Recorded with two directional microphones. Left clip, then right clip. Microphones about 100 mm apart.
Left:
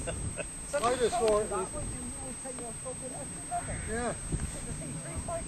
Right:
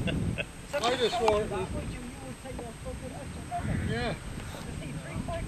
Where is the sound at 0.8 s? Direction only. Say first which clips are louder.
Right 1 dB; centre (ahead or behind).